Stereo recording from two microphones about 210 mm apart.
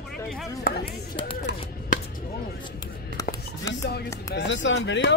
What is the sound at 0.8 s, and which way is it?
Speech, 25° left (ahead or behind).